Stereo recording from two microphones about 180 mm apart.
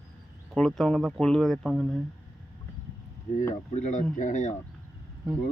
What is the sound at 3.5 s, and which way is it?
Speech, 40° left (ahead or behind).